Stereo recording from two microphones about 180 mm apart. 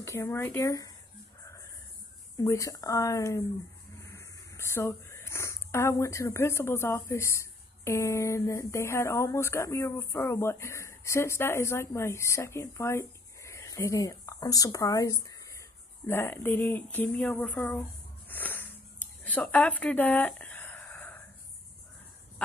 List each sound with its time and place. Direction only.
0.0 s speech: 15° left (ahead or behind)
2.3 s speech: 15° left (ahead or behind)
18.3 s a sound: 10° left (ahead or behind)